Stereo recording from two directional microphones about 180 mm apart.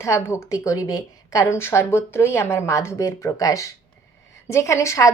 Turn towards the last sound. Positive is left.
turn(degrees=15)  # may be behind; listen again after turning